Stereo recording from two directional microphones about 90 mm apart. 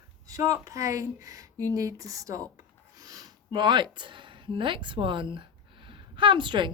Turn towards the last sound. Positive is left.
turn(degrees=-65)  # may be behind; listen again after turning